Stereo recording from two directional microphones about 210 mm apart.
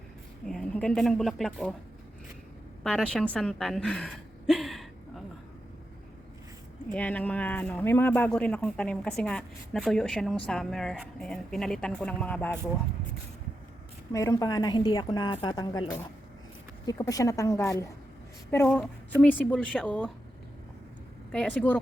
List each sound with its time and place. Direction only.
0.4 s speech: centre (ahead or behind)
2.8 s a woman's voice: 5° left (ahead or behind)
6.9 s speech: 5° left (ahead or behind)
14.1 s a woman's voice: 15° left (ahead or behind)
21.3 s a woman's voice: 5° left (ahead or behind)